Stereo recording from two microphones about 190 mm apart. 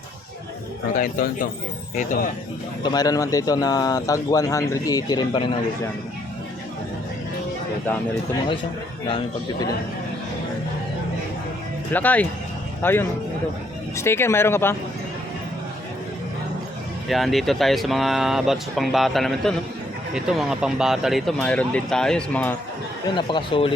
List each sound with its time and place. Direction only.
0.9 s speech: 45° left (ahead or behind)
2.8 s speech: 20° left (ahead or behind)
9.0 s speech: 25° left (ahead or behind)
11.9 s speech: 10° left (ahead or behind)
17.1 s speech: centre (ahead or behind)
23.1 s speech: 25° left (ahead or behind)